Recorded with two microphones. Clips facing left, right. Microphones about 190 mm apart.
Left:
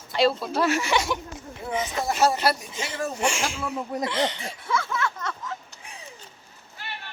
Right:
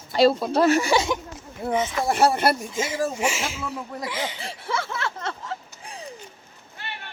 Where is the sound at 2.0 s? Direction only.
60° right (ahead or behind).